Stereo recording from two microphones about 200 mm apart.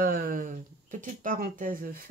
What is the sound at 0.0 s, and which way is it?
Speech, 45° right (ahead or behind).